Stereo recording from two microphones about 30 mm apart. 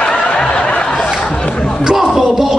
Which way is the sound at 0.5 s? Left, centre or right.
Left.